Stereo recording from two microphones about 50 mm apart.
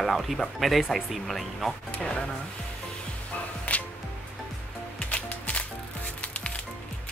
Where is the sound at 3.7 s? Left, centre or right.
Left.